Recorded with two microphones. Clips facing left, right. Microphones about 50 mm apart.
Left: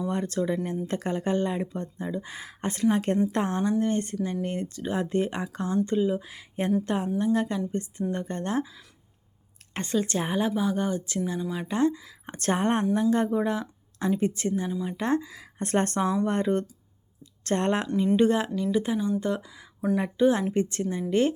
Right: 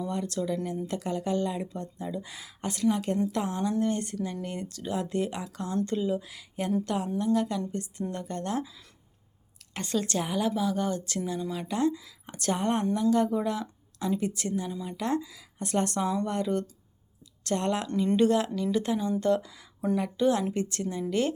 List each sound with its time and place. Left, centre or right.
0.1 s speech: left
2.2 s a woman's voice: left
3.6 s speech: left
9.7 s speech: left; by 11.7 s centre
11.7 s speech: left
12.9 s speech: left
14.7 s speech: centre
14.9 s a woman's voice: left
17.8 s speech: centre